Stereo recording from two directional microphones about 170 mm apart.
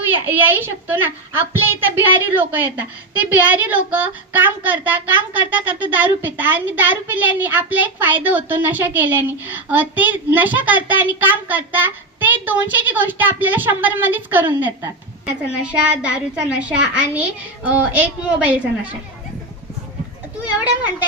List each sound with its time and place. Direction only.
0.1 s speech: 10° right (ahead or behind)